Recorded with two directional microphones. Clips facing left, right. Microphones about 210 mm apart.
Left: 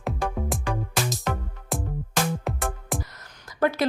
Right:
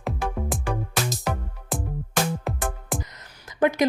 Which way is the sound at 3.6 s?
15° right (ahead or behind).